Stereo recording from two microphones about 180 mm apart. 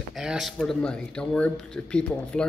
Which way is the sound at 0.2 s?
Centre (ahead or behind).